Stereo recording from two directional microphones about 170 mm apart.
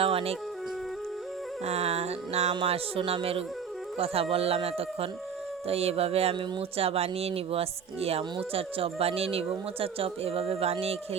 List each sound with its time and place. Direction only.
0.0 s music: 35° right (ahead or behind)
1.6 s speech: 40° right (ahead or behind)